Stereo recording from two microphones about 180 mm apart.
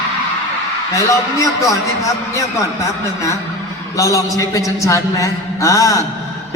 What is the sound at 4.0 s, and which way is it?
A man's voice, 20° left (ahead or behind).